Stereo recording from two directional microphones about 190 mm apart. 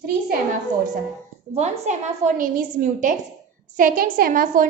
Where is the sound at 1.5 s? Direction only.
40° right (ahead or behind).